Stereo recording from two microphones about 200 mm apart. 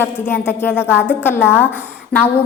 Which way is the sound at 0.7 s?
5° right (ahead or behind).